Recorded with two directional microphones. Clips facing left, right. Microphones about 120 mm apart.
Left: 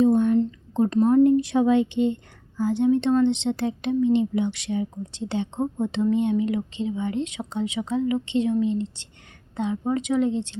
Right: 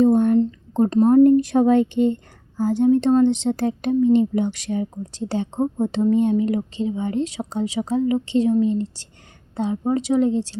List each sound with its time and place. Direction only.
0.0 s speech: 50° right (ahead or behind)